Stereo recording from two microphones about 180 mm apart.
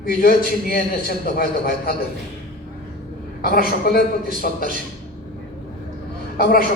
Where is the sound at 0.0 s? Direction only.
55° left (ahead or behind).